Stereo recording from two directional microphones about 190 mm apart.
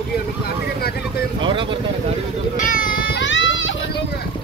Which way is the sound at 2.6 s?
45° left (ahead or behind).